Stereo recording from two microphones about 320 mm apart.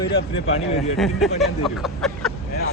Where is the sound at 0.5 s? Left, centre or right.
Centre.